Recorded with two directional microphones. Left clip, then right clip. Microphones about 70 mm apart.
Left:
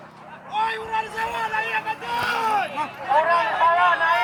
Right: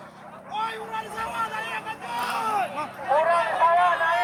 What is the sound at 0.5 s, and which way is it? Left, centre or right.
Vehicle, right.